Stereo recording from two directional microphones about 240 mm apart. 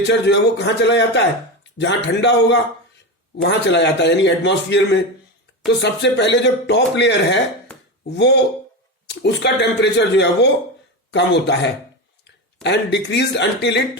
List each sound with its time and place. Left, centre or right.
0.1 s speech: left